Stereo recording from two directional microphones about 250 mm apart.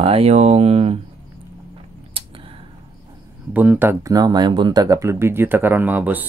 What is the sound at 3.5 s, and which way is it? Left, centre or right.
Speech, centre.